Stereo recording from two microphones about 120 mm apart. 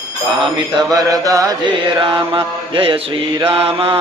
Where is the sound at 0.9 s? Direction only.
30° right (ahead or behind).